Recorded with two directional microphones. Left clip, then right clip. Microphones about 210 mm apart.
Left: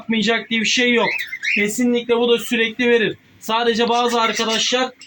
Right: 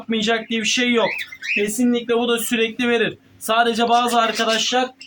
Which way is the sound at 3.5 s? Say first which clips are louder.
Right 1 dB; 20° right (ahead or behind).